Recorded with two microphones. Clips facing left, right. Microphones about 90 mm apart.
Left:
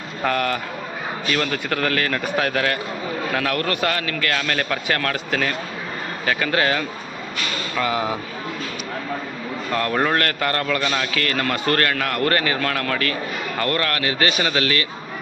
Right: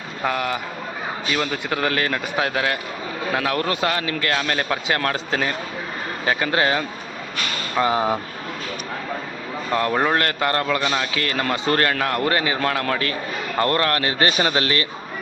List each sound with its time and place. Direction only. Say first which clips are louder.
0.2 s a man's voice: left 2 dB; 15° right (ahead or behind); by 8.2 s 30° right (ahead or behind)
9.7 s a man's voice: right 1 dB; 20° right (ahead or behind)
12.2 s speech: left 4 dB; 15° right (ahead or behind)
12.5 s a man's voice: right 1 dB; 25° right (ahead or behind)